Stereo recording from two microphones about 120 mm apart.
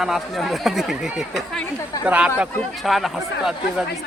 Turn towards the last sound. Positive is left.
turn(degrees=-5)  # may be behind; listen again after turning